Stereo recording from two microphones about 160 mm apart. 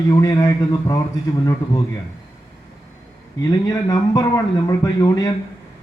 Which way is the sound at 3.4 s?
25° left (ahead or behind).